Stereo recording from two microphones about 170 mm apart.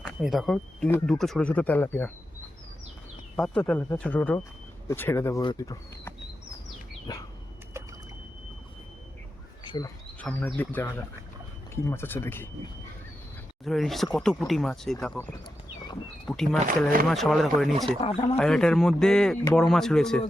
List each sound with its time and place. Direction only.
0.2 s speech: centre (ahead or behind)
3.3 s speech: 5° left (ahead or behind)
9.6 s speech: 25° left (ahead or behind)
10.2 s speech: 10° left (ahead or behind)
13.7 s speech: centre (ahead or behind)
18.0 s speech: 35° left (ahead or behind)
18.3 s speech: 5° left (ahead or behind)